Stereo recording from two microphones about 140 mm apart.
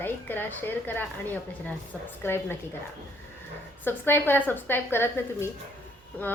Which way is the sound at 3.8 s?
15° left (ahead or behind).